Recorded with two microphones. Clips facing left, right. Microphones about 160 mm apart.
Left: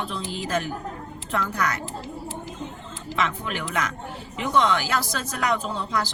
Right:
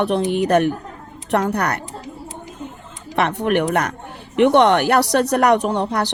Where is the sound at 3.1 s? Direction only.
65° right (ahead or behind).